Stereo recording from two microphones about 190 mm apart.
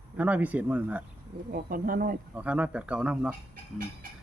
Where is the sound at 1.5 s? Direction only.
50° right (ahead or behind).